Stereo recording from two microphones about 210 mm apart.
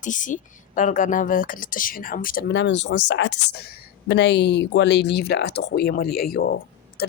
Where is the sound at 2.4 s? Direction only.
55° left (ahead or behind).